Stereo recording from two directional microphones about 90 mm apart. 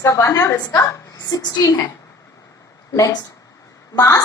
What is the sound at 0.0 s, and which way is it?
A woman's voice, 30° left (ahead or behind).